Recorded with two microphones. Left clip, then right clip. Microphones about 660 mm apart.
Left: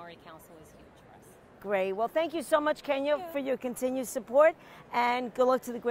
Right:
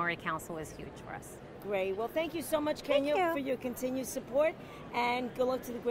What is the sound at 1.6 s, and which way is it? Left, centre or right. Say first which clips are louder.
A woman's voice: left 4 dB; left.